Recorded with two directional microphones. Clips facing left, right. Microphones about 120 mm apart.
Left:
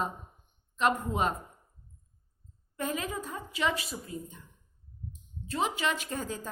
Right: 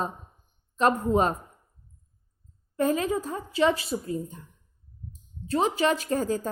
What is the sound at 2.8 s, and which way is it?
A woman's voice, 35° right (ahead or behind).